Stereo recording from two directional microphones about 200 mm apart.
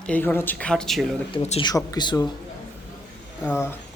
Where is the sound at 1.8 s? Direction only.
20° left (ahead or behind).